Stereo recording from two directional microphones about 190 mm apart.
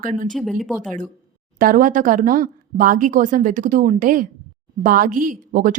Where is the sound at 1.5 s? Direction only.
45° right (ahead or behind).